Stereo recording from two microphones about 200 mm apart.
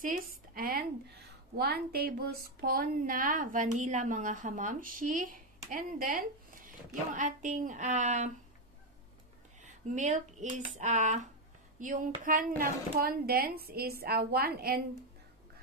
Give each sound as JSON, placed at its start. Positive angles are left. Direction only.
{"t": 0.0, "sound": "a woman's voice", "side_deg": -45}
{"t": 9.6, "sound": "a sound", "side_deg": -40}
{"t": 10.8, "sound": "speech", "side_deg": -35}